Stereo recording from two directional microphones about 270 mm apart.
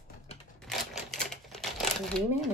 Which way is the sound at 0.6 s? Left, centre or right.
Centre.